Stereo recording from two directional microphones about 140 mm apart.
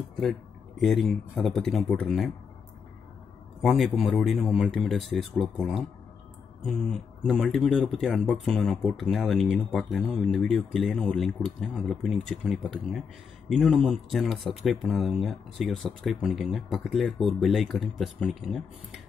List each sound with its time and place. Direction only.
0.1 s speech: centre (ahead or behind)
3.6 s speech: centre (ahead or behind)